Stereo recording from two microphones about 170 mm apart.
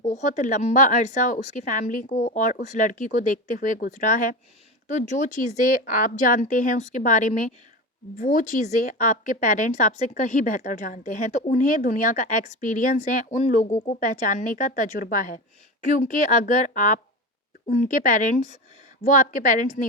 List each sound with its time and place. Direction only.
0.0 s speech: 45° left (ahead or behind)